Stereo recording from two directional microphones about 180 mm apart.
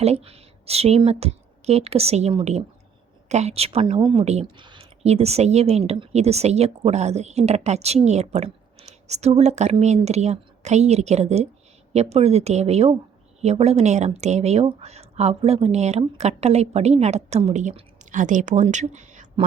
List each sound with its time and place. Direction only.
0.0 s speech: 35° right (ahead or behind)